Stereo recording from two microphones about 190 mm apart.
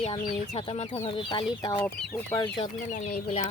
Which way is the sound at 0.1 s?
25° left (ahead or behind).